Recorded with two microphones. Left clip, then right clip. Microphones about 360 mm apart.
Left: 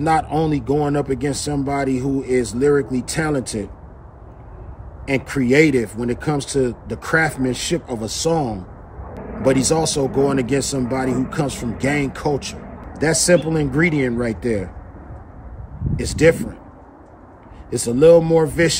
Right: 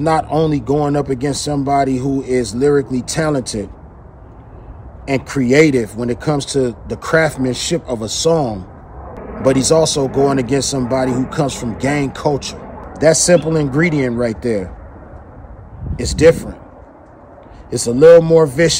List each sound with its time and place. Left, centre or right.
0.0 s speech: centre
5.0 s speech: centre
16.0 s speech: centre
17.6 s speech: centre